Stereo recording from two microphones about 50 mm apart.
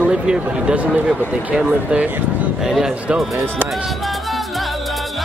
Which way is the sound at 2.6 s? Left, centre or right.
Centre.